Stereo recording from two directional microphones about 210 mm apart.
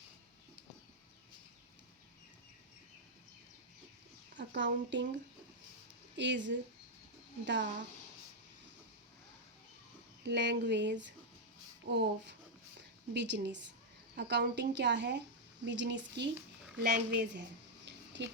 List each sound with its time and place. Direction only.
4.4 s a woman's voice: 60° right (ahead or behind)
6.1 s a woman's voice: 60° right (ahead or behind)
10.2 s a woman's voice: 55° right (ahead or behind)
17.8 s a sound: 55° right (ahead or behind)